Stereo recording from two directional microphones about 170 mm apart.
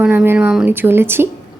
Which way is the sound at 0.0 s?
10° right (ahead or behind).